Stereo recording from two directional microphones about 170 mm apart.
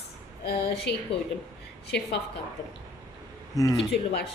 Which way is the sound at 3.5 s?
20° left (ahead or behind).